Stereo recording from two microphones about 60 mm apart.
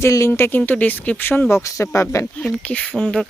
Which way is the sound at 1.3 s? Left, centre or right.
Left.